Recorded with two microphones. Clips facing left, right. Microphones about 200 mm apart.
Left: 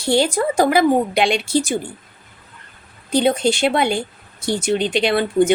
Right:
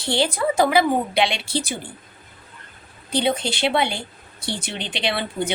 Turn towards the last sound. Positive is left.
turn(degrees=45)  # may be behind; listen again after turning